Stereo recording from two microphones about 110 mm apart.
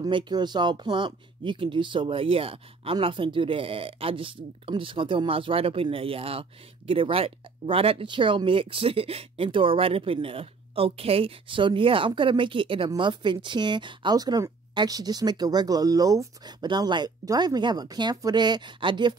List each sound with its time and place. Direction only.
0.0 s speech: 40° right (ahead or behind)